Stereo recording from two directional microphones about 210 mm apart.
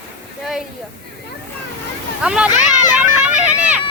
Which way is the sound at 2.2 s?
5° right (ahead or behind).